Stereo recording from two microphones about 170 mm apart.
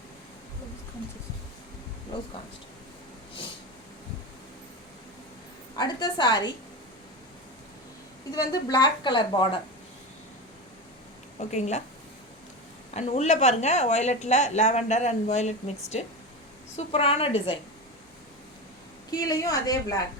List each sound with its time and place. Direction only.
5.7 s a woman's voice: 25° left (ahead or behind)
8.5 s a woman's voice: 25° left (ahead or behind)
11.3 s a woman's voice: 40° left (ahead or behind)
12.9 s speech: 40° left (ahead or behind)
19.1 s a woman's voice: 20° left (ahead or behind)